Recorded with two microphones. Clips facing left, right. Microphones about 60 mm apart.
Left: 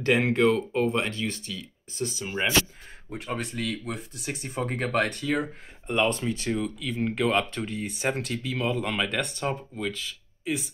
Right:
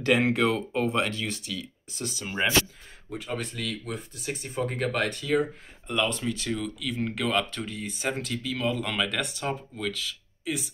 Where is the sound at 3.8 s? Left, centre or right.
Left.